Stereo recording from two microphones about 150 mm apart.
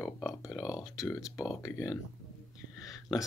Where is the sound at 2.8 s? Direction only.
25° left (ahead or behind).